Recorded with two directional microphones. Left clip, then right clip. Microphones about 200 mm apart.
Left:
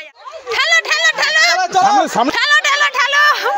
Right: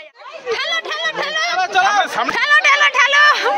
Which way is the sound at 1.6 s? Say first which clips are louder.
Left 2 dB; 45° left (ahead or behind).